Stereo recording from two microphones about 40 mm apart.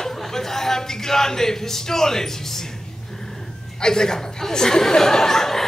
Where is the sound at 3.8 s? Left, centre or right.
Centre.